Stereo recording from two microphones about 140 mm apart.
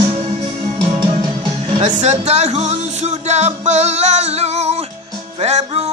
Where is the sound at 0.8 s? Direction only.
35° right (ahead or behind).